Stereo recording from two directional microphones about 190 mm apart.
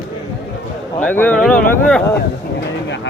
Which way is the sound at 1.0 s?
10° left (ahead or behind).